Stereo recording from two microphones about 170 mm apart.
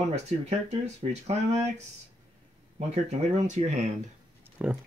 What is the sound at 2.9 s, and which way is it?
Speech, 40° right (ahead or behind).